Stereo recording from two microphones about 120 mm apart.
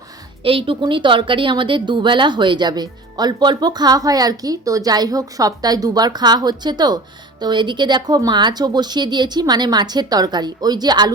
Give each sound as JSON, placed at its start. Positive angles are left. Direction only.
{"t": 0.4, "sound": "speech", "side_deg": -45}